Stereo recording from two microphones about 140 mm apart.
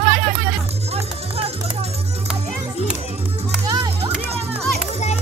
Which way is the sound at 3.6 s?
25° right (ahead or behind).